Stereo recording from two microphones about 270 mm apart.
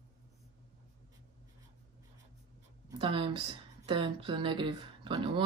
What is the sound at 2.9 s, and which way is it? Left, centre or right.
Speech, centre.